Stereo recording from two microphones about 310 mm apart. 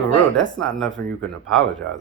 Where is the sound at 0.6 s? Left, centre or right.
Centre.